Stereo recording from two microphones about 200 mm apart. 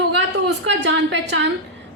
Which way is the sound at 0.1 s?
60° right (ahead or behind).